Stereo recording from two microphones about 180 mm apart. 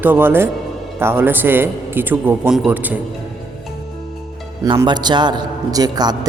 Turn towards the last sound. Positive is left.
turn(degrees=-20)  # may be behind; listen again after turning